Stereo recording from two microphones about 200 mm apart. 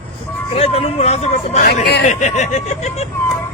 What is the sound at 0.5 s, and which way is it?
Speech, 30° left (ahead or behind).